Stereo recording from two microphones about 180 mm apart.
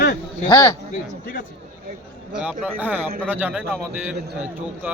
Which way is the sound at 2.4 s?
5° right (ahead or behind).